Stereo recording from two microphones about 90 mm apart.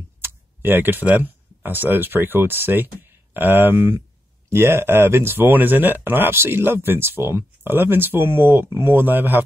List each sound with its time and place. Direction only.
0.2 s speech: 25° right (ahead or behind)